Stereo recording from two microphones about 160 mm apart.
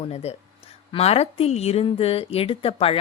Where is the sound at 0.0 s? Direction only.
40° left (ahead or behind).